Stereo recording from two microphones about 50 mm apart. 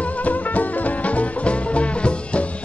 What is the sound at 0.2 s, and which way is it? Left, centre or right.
Music, left.